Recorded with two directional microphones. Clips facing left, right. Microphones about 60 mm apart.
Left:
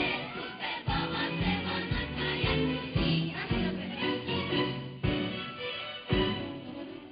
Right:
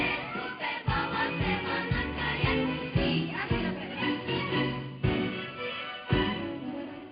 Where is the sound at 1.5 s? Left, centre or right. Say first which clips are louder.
Right 2 dB; right.